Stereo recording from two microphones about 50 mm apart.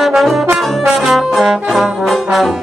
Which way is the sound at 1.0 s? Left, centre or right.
Centre.